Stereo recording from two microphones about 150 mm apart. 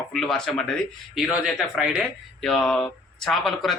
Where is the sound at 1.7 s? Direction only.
5° right (ahead or behind).